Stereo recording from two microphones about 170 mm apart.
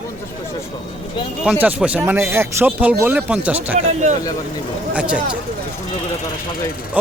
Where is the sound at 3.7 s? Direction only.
45° right (ahead or behind).